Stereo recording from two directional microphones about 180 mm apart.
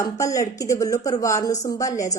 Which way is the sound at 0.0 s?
15° left (ahead or behind).